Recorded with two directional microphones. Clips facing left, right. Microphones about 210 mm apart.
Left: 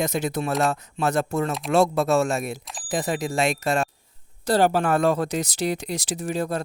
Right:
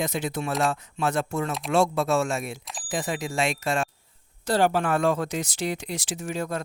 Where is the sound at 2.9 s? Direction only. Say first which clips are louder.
Left 4 dB; 35° left (ahead or behind).